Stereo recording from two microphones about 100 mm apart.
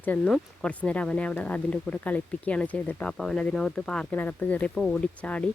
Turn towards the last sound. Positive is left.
turn(degrees=10)  # may be behind; listen again after turning